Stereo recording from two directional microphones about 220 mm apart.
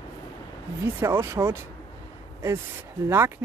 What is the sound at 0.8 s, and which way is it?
Speech, 10° right (ahead or behind).